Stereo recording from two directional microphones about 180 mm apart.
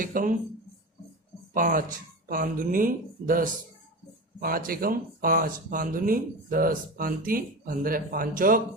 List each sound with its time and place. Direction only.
0.0 s speech: 50° right (ahead or behind)
1.5 s speech: 50° right (ahead or behind)